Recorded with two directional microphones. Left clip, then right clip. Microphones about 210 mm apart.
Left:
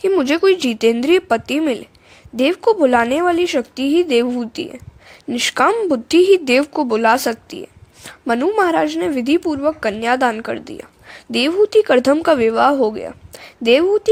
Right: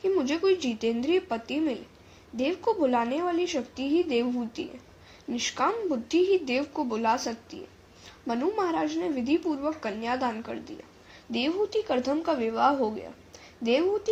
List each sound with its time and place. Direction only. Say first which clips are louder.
0.0 s speech: left 11 dB; 50° left (ahead or behind)